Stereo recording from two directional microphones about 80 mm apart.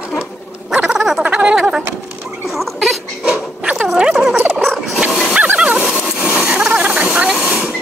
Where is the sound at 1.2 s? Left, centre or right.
Centre.